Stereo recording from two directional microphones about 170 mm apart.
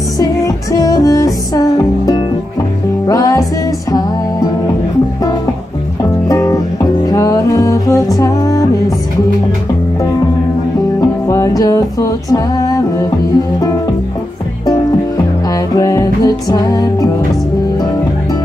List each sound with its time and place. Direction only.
0.2 s music: 20° left (ahead or behind)
6.2 s music: 20° left (ahead or behind)
11.2 s music: 20° left (ahead or behind)
15.7 s music: 20° left (ahead or behind)